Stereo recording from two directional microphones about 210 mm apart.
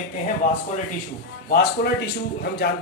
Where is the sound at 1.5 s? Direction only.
50° left (ahead or behind).